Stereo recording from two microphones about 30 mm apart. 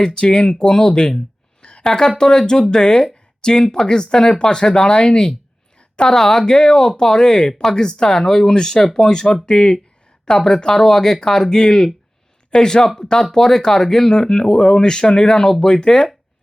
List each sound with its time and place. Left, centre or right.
0.3 s speech: left
1.6 s speech: left
5.0 s speech: left
6.4 s speech: left